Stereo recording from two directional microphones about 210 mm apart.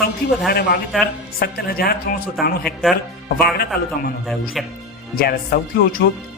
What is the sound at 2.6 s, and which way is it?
Speech, centre (ahead or behind).